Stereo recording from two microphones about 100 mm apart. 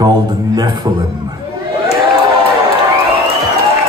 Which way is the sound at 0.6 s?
50° right (ahead or behind).